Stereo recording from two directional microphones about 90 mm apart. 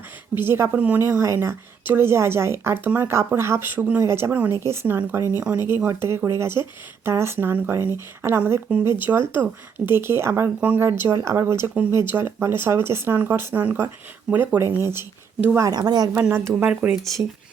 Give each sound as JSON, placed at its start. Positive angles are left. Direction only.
{"t": 0.3, "sound": "a woman's voice", "side_deg": -25}
{"t": 0.8, "sound": "speech", "side_deg": -15}
{"t": 1.2, "sound": "a woman's voice", "side_deg": -30}
{"t": 15.5, "sound": "speech", "side_deg": -40}
{"t": 16.3, "sound": "a woman's voice", "side_deg": -30}
{"t": 16.6, "sound": "speech", "side_deg": -15}